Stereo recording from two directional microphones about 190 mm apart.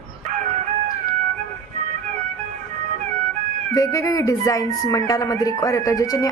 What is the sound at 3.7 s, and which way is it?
Speech, 20° left (ahead or behind).